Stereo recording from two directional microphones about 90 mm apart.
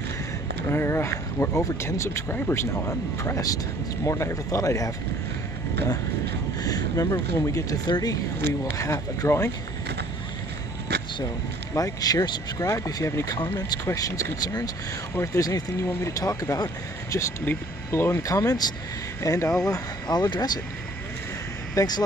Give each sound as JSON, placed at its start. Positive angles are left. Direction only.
{"t": 0.7, "sound": "speech", "side_deg": 30}
{"t": 6.6, "sound": "speech", "side_deg": 45}
{"t": 8.7, "sound": "speech", "side_deg": 35}
{"t": 11.7, "sound": "speech", "side_deg": 40}
{"t": 17.5, "sound": "speech", "side_deg": 25}
{"t": 18.2, "sound": "speech", "side_deg": 40}
{"t": 20.1, "sound": "speech", "side_deg": 50}
{"t": 21.7, "sound": "speech", "side_deg": 50}